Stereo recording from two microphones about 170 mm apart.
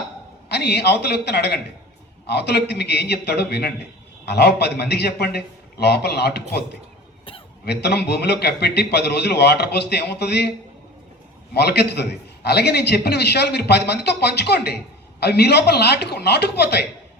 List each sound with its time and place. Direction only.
0.4 s a man's voice: 75° left (ahead or behind)
7.6 s a man's voice: 75° left (ahead or behind)
11.5 s a man's voice: 75° left (ahead or behind)